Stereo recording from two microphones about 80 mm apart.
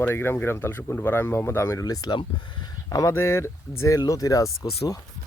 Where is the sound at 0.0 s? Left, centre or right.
Left.